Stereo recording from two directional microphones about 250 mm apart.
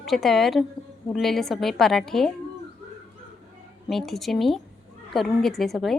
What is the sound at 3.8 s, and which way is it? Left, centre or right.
Speech, centre.